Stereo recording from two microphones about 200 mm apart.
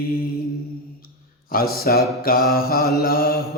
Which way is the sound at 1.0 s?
50° left (ahead or behind).